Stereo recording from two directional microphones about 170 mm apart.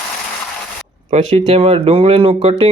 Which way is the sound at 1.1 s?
40° right (ahead or behind).